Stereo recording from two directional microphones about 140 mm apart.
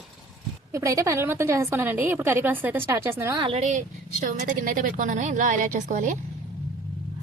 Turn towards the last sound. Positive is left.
turn(degrees=-65)  # may be behind; listen again after turning